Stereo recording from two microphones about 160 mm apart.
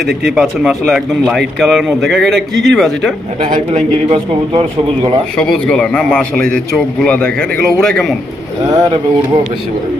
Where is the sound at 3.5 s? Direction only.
45° right (ahead or behind).